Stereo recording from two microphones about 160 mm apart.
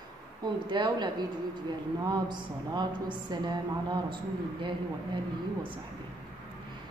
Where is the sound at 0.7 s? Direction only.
30° right (ahead or behind).